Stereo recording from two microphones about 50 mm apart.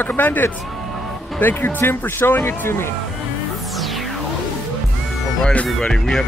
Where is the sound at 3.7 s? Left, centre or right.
Centre.